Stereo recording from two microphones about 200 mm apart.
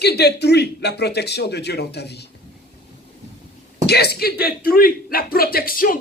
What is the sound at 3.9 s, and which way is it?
Speech, 55° left (ahead or behind).